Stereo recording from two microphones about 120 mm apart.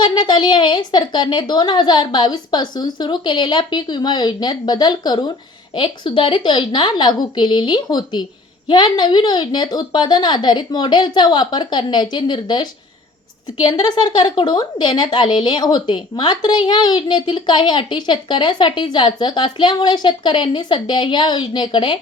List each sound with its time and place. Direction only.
0.0 s speech: 40° left (ahead or behind)
13.8 s speech: 40° left (ahead or behind)